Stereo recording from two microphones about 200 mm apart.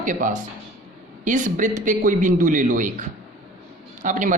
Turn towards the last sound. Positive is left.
turn(degrees=-40)  # may be behind; listen again after turning